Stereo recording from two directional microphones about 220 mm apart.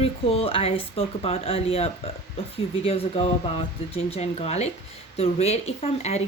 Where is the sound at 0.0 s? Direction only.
25° left (ahead or behind).